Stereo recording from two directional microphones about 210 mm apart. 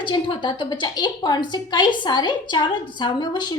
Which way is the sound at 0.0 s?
25° left (ahead or behind).